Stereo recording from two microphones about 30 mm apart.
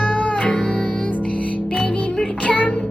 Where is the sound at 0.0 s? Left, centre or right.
Left.